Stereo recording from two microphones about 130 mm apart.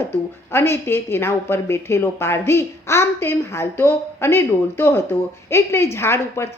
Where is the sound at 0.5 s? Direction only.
20° left (ahead or behind).